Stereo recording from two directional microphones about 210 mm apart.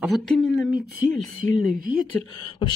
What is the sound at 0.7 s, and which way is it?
Speech, 45° right (ahead or behind).